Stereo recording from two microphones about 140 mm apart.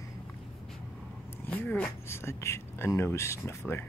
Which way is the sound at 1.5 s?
10° left (ahead or behind).